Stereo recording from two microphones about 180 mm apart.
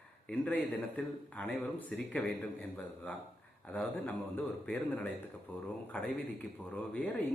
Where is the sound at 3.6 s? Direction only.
5° left (ahead or behind).